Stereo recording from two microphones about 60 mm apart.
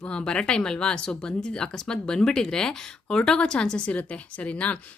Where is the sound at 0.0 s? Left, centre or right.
Centre.